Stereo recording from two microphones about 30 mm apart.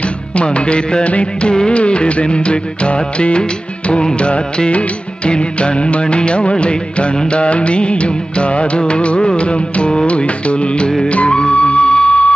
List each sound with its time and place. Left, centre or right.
0.4 s music of bollywood: left
11.1 s music: left